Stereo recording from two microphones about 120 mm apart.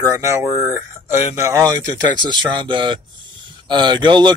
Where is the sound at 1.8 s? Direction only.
40° right (ahead or behind).